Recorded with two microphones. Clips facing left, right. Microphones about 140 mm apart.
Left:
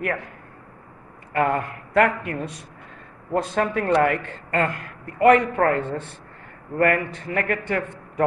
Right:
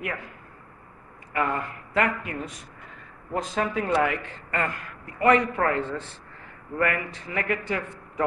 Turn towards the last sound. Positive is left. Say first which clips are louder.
# left 4 dB
turn(degrees=55)  # may be behind; listen again after turning